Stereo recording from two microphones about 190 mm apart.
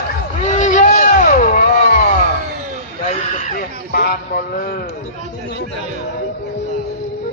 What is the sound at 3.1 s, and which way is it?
Speech, 40° left (ahead or behind).